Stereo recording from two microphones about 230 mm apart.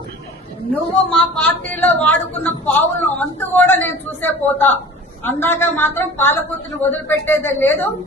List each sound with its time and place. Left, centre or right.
0.7 s a woman's voice: centre